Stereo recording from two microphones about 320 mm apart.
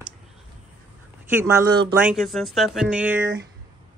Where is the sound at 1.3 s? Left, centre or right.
Centre.